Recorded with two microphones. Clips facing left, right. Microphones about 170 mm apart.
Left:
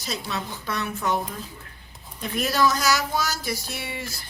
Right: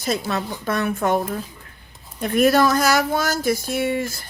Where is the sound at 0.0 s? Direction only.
50° right (ahead or behind).